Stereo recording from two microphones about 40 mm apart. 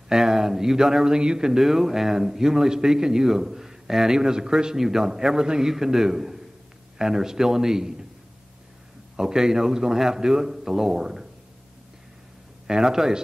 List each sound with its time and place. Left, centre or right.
0.1 s speech: centre
1.6 s speech: centre
9.1 s speech: centre
12.6 s speech: centre